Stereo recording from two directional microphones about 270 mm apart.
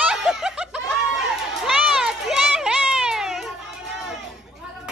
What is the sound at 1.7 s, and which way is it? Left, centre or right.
Children playing, centre.